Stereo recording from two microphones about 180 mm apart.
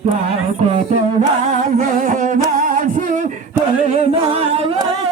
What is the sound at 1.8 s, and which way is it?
Humming, 45° right (ahead or behind).